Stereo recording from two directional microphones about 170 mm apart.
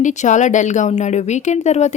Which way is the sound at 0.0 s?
45° left (ahead or behind).